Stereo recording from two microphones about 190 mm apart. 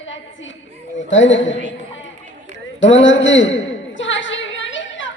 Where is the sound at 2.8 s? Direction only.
80° left.